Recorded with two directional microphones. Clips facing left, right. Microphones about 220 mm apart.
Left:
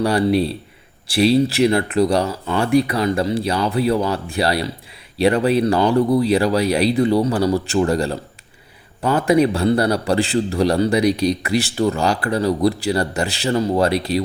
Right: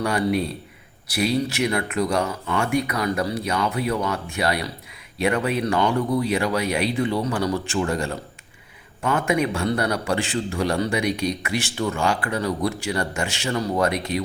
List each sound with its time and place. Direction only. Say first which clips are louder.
0.0 s a man's voice: left 5 dB; 35° left (ahead or behind)